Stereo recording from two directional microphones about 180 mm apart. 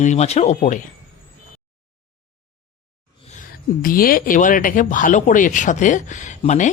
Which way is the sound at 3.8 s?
50° left (ahead or behind).